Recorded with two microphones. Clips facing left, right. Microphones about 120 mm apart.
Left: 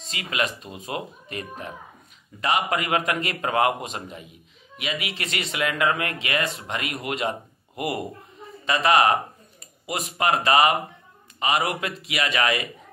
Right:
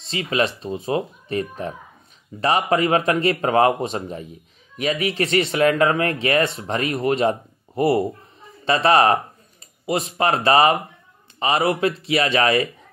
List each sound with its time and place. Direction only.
0.0 s speech: 30° right (ahead or behind)